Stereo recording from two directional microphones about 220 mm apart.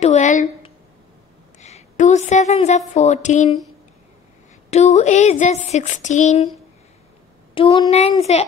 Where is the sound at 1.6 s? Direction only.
30° left (ahead or behind).